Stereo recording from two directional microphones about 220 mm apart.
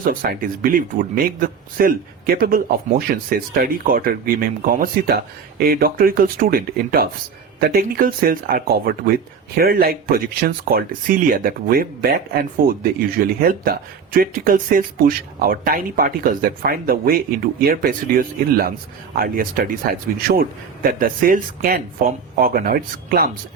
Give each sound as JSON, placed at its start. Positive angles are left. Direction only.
{"t": 0.0, "sound": "speech", "side_deg": -40}